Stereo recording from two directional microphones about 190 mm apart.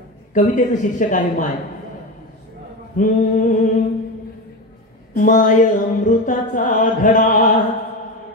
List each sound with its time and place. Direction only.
0.3 s speech: 40° left (ahead or behind)
3.0 s mantra: 45° left (ahead or behind)
5.1 s mantra: 45° left (ahead or behind)